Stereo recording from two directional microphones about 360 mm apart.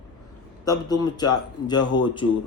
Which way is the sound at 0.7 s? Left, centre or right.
Centre.